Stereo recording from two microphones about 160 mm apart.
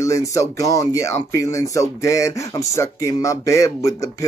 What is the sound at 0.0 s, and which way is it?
Speech, 20° left (ahead or behind).